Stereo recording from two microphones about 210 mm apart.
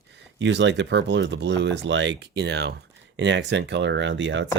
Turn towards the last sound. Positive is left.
turn(degrees=-60)  # may be behind; listen again after turning